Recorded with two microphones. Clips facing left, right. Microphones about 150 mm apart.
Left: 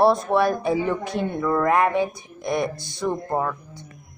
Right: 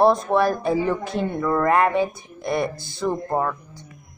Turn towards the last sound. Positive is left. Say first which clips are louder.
# right 1 dB
turn(degrees=0)  # may be behind; listen again after turning